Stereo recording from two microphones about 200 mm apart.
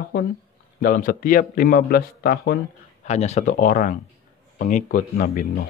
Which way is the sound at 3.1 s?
35° left (ahead or behind).